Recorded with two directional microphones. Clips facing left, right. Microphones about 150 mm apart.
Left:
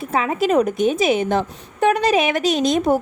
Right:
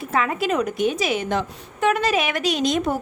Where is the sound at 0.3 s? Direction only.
45° left (ahead or behind).